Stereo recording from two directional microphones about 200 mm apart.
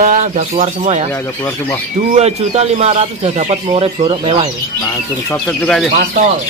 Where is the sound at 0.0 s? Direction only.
40° right (ahead or behind).